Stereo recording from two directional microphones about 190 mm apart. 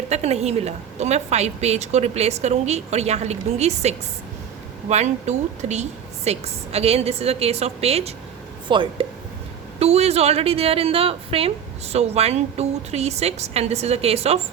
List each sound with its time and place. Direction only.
0.1 s a woman's voice: 35° right (ahead or behind)